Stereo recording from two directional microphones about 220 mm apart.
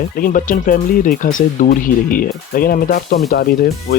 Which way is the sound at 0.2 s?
40° left (ahead or behind).